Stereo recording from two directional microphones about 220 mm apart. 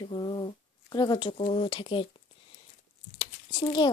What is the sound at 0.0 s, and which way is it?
Speech, 20° left (ahead or behind).